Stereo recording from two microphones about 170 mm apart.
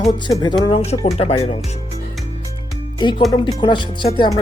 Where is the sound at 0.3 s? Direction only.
25° left (ahead or behind).